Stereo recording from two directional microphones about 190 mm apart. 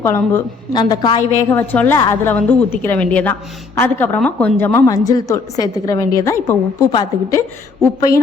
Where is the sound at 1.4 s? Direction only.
10° left (ahead or behind).